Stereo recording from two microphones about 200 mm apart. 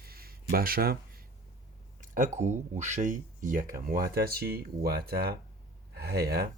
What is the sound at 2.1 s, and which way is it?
Speech, 40° right (ahead or behind).